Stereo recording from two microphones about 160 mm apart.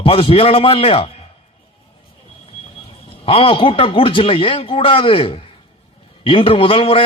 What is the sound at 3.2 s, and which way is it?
A man's voice, 35° left (ahead or behind).